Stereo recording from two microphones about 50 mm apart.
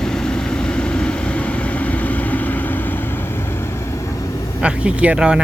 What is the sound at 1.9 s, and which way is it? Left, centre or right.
Vehicle, left.